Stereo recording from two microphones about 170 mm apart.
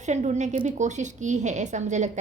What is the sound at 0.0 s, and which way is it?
A woman's voice, 45° right (ahead or behind).